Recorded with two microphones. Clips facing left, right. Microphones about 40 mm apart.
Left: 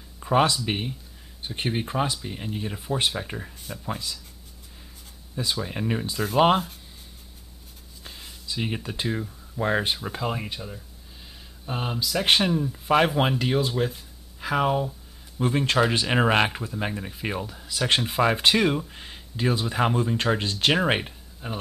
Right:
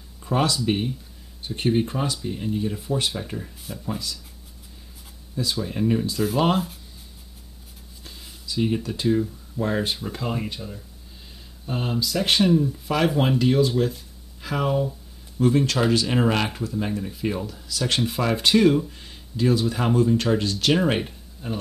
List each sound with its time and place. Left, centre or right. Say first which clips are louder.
0.2 s speech: left 2 dB; left
5.3 s speech: right 2 dB; left
8.0 s a sound: left 1 dB; left
9.6 s speech: even; left
12.7 s speech: left 1 dB; left